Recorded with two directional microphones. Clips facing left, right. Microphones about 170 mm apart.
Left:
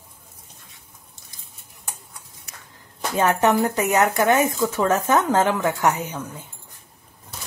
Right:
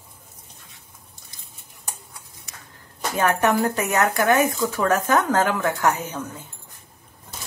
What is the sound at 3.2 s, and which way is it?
Speech, 20° left (ahead or behind).